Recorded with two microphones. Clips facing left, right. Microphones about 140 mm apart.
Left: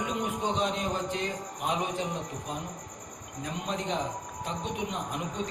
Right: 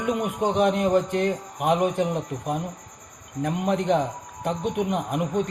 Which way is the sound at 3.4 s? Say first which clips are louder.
Right 10 dB; 60° right (ahead or behind).